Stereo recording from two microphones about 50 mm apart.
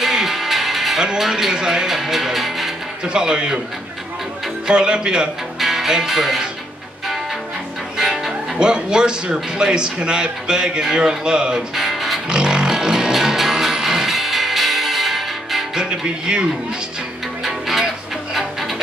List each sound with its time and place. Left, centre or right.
0.0 s music: centre
3.1 s speech: centre
4.6 s speech: centre
5.6 s speech: centre
8.0 s speech: centre
11.7 s music: centre
12.3 s music: centre
15.8 s speech: centre
17.5 s music: centre